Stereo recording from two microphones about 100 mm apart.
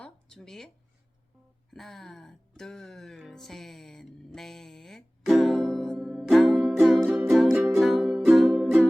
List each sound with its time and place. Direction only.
0.0 s a sound: 5° left (ahead or behind)
1.7 s music: 5° left (ahead or behind)
7.5 s music: 25° right (ahead or behind)
7.8 s music: centre (ahead or behind)